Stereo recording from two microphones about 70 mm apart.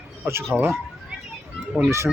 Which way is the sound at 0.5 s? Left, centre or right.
Right.